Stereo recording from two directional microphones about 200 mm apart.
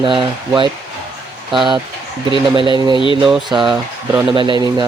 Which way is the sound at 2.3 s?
25° right (ahead or behind).